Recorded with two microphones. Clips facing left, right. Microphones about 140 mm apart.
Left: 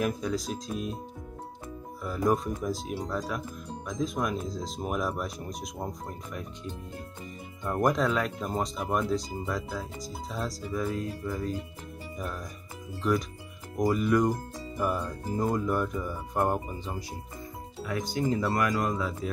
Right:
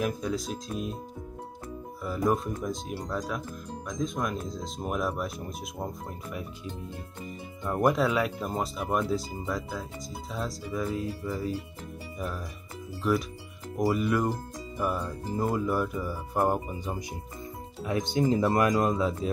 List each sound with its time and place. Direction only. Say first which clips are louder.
0.0 s speech: even; centre (ahead or behind)
2.0 s speech: even; centre (ahead or behind)
7.6 s speech: right 1 dB; 5° right (ahead or behind)
13.0 s speech: even; 5° right (ahead or behind)
17.8 s speech: right 3 dB; 25° right (ahead or behind)